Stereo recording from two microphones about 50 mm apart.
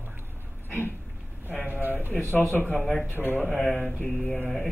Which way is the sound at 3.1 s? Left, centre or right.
Left.